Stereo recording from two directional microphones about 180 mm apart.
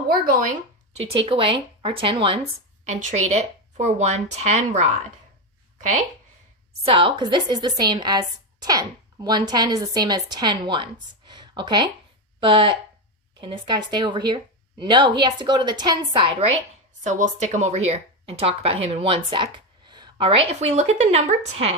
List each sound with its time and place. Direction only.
0.9 s speech: 30° right (ahead or behind)
2.8 s speech: 40° right (ahead or behind)
6.8 s speech: 30° right (ahead or behind)
17.0 s speech: 45° right (ahead or behind)